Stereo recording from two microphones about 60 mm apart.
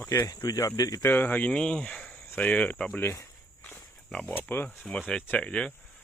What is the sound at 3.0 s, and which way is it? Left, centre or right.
Speech, left.